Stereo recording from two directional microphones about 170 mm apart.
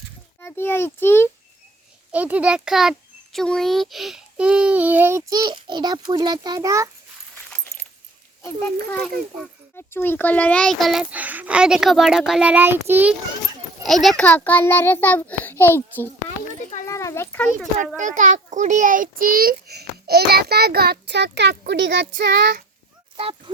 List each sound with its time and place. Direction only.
0.4 s a child's voice: 15° left (ahead or behind)
2.1 s a child's voice: 10° right (ahead or behind)
7.3 s keys jangling: 10° left (ahead or behind)
8.9 s a child's voice: 5° left (ahead or behind); by 13.1 s 10° right (ahead or behind)
13.8 s a child's voice: centre (ahead or behind)
17.9 s a child's voice: 45° right (ahead or behind); by 22.5 s 90° right